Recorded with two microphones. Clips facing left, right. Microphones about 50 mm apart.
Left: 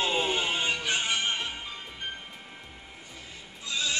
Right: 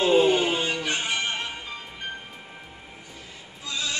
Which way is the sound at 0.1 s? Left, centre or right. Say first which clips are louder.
Right 8 dB; centre.